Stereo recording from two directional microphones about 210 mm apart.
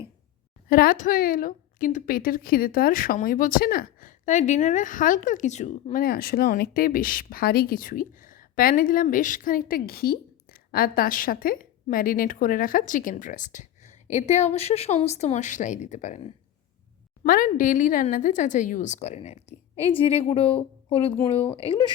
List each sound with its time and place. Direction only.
0.7 s a woman's voice: 40° left (ahead or behind); by 21.9 s 25° left (ahead or behind)